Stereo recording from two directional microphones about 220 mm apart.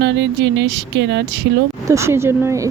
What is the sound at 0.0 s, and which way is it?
Speech, 55° right (ahead or behind).